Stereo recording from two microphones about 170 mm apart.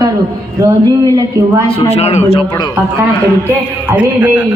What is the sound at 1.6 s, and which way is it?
Speech, 35° left (ahead or behind).